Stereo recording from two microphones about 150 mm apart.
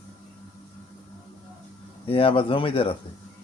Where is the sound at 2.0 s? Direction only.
35° left (ahead or behind).